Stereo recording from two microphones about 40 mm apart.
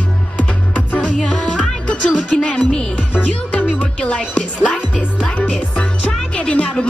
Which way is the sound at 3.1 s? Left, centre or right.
Left.